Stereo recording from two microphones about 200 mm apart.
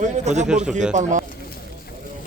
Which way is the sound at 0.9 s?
40° right (ahead or behind).